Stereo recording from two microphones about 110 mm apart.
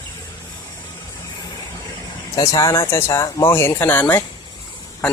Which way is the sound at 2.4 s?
35° left (ahead or behind).